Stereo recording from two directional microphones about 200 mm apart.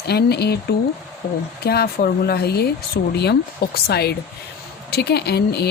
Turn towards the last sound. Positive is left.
turn(degrees=55)  # may be behind; listen again after turning